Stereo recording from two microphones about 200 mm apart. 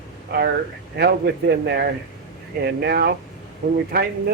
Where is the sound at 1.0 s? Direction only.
55° right (ahead or behind).